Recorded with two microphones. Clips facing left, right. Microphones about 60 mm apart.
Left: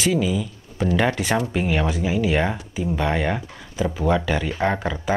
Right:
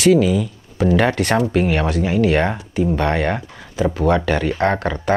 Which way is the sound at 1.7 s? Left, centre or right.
Centre.